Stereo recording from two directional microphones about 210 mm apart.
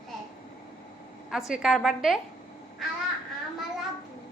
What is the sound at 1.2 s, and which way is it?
Speech, centre (ahead or behind).